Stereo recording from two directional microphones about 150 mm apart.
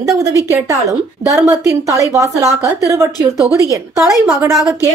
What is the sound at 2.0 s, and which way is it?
A woman's voice, 20° right (ahead or behind).